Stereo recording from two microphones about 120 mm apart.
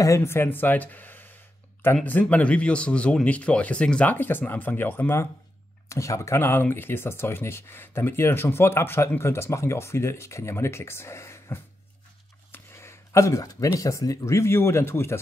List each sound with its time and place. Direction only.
0.0 s speech: 25° left (ahead or behind)